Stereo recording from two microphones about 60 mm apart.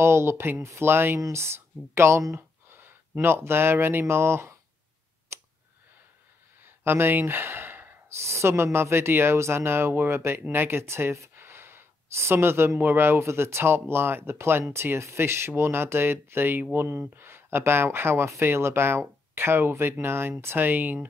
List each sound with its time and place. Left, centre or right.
0.0 s speech: right
5.3 s a sound: right
6.6 s gasp: right
8.2 s speech: right